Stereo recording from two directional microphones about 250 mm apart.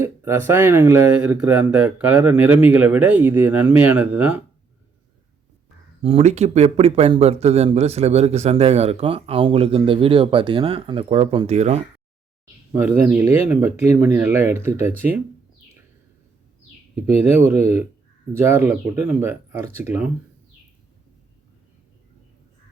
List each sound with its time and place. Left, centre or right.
0.0 s speech: centre
6.0 s speech: right
12.7 s speech: centre
17.2 s speech: centre